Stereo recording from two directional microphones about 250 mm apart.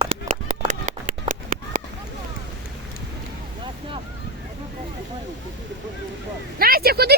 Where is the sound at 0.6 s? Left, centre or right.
Right.